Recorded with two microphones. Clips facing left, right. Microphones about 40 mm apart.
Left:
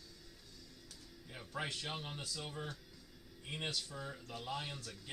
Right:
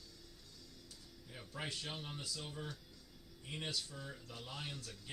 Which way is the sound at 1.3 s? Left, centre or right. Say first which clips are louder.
Left 5 dB; left.